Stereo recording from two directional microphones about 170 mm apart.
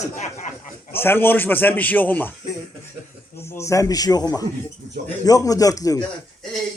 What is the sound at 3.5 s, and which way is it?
A man's voice, 15° left (ahead or behind).